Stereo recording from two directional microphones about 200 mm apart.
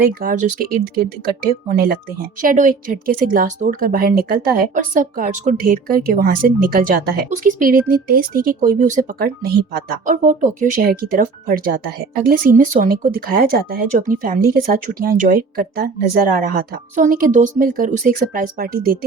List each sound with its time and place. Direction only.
0.1 s speech: 45° right (ahead or behind)